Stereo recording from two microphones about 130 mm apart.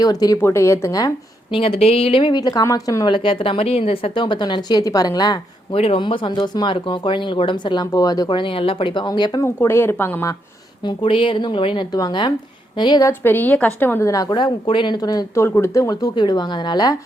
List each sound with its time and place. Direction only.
0.0 s speech: 30° left (ahead or behind)
1.5 s speech: 45° left (ahead or behind); by 5.4 s 30° left (ahead or behind)
5.7 s speech: 45° left (ahead or behind)
9.4 s a woman's voice: 20° left (ahead or behind)
10.8 s speech: 40° left (ahead or behind)
13.1 s a woman's voice: 15° left (ahead or behind)
14.1 s speech: 30° left (ahead or behind)